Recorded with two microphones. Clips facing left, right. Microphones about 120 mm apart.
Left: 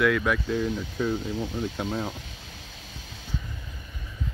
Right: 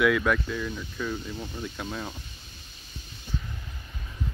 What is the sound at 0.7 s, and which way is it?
Speech, 90° left.